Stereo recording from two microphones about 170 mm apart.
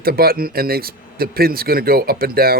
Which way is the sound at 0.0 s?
60° right (ahead or behind).